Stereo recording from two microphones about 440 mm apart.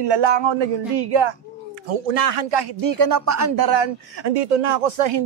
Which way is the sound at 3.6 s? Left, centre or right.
Right.